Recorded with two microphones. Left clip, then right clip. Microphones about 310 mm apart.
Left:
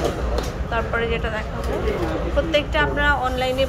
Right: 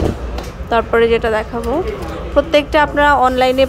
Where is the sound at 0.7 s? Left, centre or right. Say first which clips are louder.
Right 12 dB; centre.